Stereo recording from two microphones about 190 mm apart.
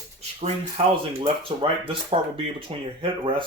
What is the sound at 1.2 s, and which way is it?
Speech, 30° right (ahead or behind).